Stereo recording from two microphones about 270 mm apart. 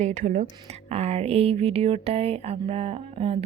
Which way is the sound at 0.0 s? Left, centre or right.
Right.